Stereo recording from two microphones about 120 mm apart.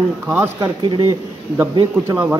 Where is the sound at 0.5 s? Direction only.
40° right (ahead or behind).